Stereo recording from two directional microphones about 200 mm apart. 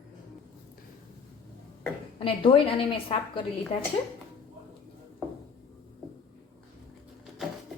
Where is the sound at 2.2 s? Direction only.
25° left (ahead or behind).